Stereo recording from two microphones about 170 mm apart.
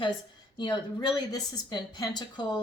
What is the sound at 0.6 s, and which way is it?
Speech, 25° left (ahead or behind).